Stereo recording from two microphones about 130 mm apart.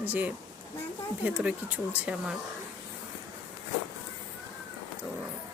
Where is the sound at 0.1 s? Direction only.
15° right (ahead or behind).